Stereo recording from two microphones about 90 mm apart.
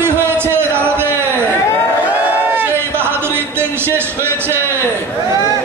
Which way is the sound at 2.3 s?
25° right (ahead or behind).